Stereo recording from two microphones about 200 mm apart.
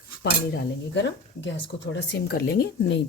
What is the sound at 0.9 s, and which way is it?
Speech, 65° left (ahead or behind).